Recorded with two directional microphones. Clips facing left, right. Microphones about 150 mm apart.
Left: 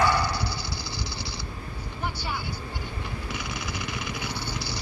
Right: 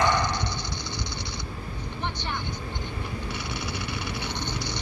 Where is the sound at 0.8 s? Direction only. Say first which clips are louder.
Right 1 dB; 30° left (ahead or behind).